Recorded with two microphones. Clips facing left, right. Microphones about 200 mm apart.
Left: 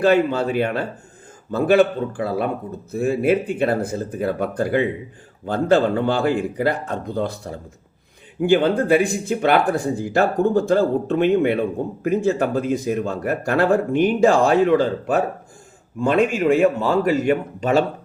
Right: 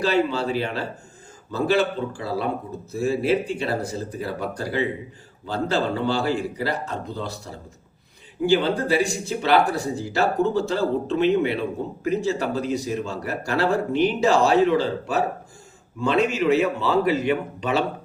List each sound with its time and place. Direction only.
0.0 s speech: 55° left (ahead or behind)